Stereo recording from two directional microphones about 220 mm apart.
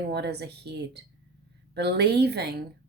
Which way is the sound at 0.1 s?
50° right (ahead or behind).